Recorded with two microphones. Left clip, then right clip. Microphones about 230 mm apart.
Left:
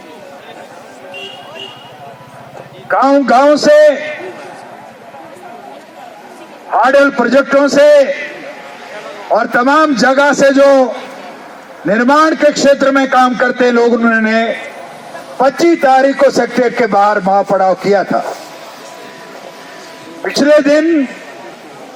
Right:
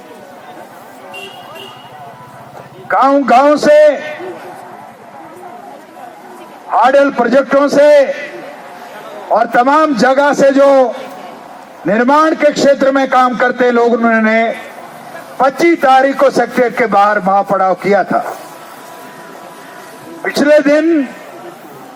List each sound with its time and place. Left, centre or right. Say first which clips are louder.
2.9 s a man's voice: even; left
6.7 s a man's voice: even; left
9.3 s a man's voice: right 1 dB; left
11.9 s a man's voice: even; left
20.2 s a man's voice: even; left